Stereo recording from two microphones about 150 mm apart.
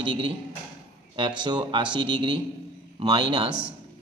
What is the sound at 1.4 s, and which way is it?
A man's voice, 30° right (ahead or behind).